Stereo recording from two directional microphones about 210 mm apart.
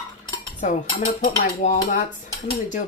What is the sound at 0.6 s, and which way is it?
Speech, 35° left (ahead or behind).